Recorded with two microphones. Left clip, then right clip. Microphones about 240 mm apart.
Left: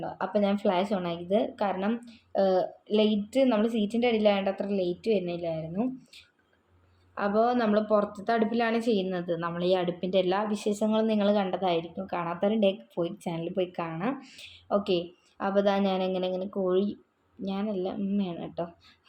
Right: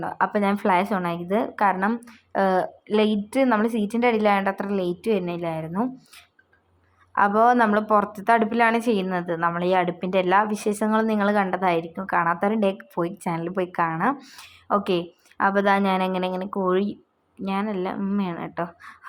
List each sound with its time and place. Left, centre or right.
0.0 s a woman's voice: centre
7.2 s speech: centre